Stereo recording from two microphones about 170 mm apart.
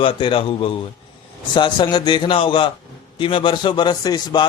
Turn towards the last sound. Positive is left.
turn(degrees=25)  # may be behind; listen again after turning